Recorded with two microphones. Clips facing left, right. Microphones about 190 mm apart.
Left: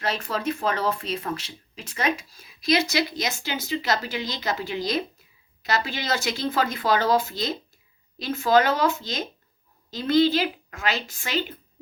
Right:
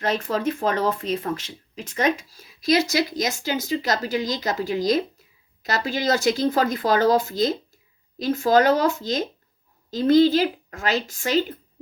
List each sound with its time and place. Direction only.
0.0 s speech: 45° right (ahead or behind)